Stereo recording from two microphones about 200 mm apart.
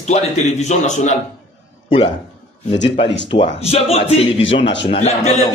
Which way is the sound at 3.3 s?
30° left (ahead or behind).